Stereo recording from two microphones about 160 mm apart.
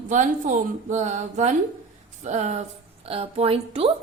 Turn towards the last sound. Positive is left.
turn(degrees=-40)  # may be behind; listen again after turning